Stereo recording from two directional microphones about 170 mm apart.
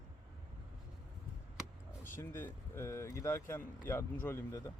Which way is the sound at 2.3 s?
15° left (ahead or behind).